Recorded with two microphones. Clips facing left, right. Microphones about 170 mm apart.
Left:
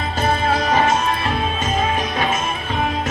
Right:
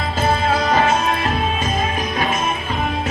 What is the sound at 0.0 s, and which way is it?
Music, 30° right (ahead or behind).